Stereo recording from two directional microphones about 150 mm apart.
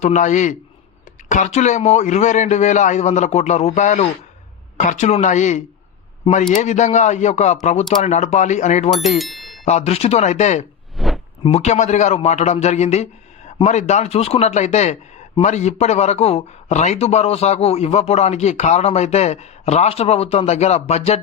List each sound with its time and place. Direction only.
0.0 s speech: 55° left (ahead or behind)
9.0 s speech: centre (ahead or behind)
9.6 s speech: 45° left (ahead or behind)
10.9 s a sound: centre (ahead or behind)
11.4 s speech: 45° left (ahead or behind)